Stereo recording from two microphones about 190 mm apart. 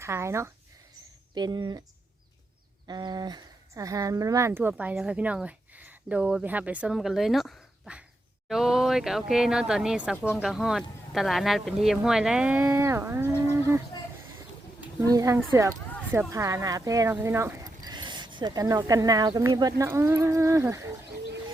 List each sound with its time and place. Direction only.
0.0 s speech: 15° right (ahead or behind)
2.8 s speech: 20° right (ahead or behind)
15.0 s speech: 15° right (ahead or behind)